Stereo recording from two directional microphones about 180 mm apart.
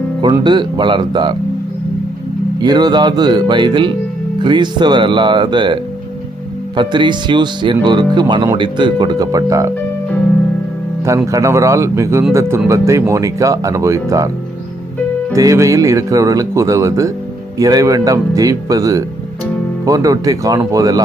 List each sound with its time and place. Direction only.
0.4 s speech: 25° right (ahead or behind)
2.6 s speech: 25° right (ahead or behind)
11.3 s speech: 15° right (ahead or behind)
15.3 s speech: 15° right (ahead or behind)